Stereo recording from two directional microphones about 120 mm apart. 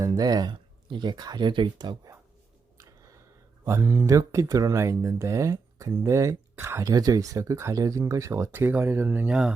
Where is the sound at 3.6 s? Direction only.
25° right (ahead or behind).